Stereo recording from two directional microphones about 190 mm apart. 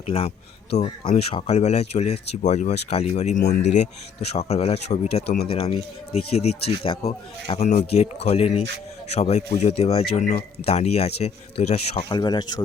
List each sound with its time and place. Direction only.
0.0 s speech: 30° left (ahead or behind)
5.2 s speech: 55° left (ahead or behind)
5.5 s speech: 30° left (ahead or behind)